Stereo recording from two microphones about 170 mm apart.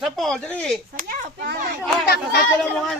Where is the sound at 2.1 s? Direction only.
70° left (ahead or behind).